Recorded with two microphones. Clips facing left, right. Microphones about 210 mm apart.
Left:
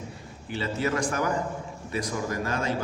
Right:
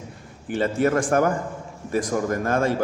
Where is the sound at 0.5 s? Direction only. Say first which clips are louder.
Right 7 dB; 50° right (ahead or behind).